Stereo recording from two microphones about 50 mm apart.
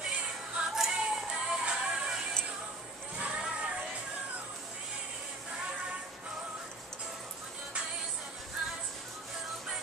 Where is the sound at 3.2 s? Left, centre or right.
Right.